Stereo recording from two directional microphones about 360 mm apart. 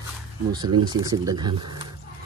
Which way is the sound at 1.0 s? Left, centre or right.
Centre.